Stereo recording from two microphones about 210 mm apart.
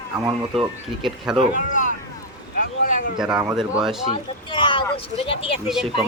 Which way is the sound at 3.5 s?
Centre (ahead or behind).